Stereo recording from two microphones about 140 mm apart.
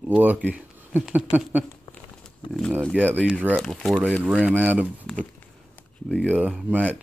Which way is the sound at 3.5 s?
5° left (ahead or behind).